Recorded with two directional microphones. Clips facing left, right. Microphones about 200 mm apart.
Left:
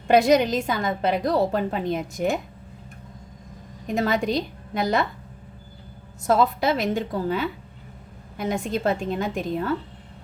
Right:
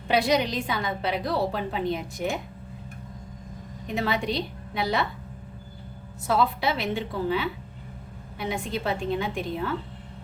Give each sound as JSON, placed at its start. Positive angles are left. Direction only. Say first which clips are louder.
{"t": 0.1, "sound": "a woman's voice", "louder": "left 6 dB", "side_deg": 45}
{"t": 3.8, "sound": "a woman's voice", "louder": "left 4 dB", "side_deg": 45}
{"t": 6.2, "sound": "a woman's voice", "louder": "left 4 dB", "side_deg": 45}